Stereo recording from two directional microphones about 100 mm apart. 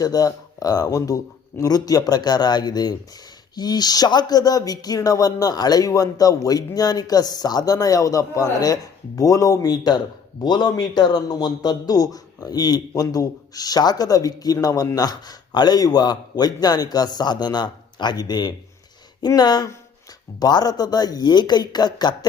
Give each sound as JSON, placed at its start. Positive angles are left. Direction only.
{"t": 0.0, "sound": "a man's voice", "side_deg": 35}